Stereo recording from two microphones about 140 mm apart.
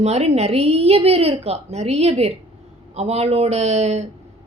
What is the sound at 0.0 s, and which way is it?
A woman's voice, 50° right (ahead or behind).